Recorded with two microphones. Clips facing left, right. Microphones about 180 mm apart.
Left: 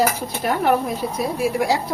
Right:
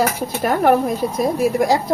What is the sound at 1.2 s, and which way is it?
Speech, 45° right (ahead or behind).